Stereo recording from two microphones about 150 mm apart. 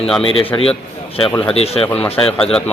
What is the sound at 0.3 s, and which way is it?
A man's voice, 35° left (ahead or behind).